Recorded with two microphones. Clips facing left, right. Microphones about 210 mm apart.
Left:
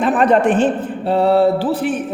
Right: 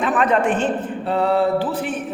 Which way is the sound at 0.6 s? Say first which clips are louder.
Left 5 dB; 35° left (ahead or behind).